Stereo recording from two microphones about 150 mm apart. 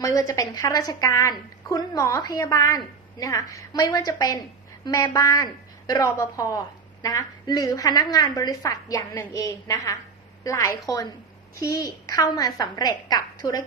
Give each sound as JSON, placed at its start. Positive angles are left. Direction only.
{"t": 0.0, "sound": "a woman's voice", "side_deg": 20}